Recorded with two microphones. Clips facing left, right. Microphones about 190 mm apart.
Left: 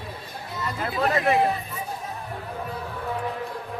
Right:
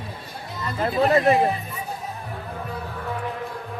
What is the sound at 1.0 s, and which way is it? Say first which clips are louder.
Speech: right 4 dB; 30° right (ahead or behind).